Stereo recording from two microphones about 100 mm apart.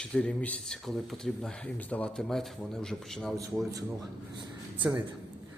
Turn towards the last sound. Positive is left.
turn(degrees=-20)  # may be behind; listen again after turning